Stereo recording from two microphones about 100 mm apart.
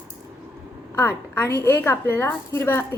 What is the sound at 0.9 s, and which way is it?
A woman's voice, 25° left (ahead or behind).